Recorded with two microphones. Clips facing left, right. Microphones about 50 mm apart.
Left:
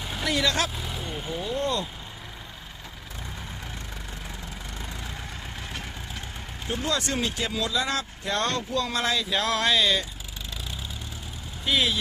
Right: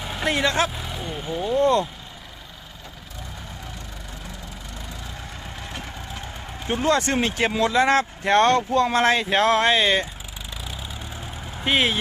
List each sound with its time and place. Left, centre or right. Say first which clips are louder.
0.2 s speech: right 4 dB; right
0.7 s speech: right 2 dB; centre
1.4 s speech: right 9 dB; right
6.8 s speech: right 7 dB; right
11.6 s speech: right 4 dB; right